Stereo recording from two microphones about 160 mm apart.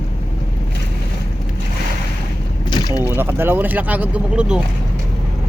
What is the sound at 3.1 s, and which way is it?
A man's voice, 15° right (ahead or behind).